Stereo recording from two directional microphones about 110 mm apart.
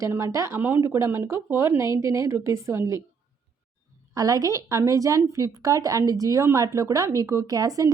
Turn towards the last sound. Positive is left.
turn(degrees=-35)  # may be behind; listen again after turning